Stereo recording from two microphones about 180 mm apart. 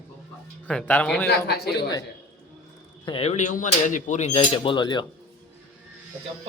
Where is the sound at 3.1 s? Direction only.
35° left (ahead or behind).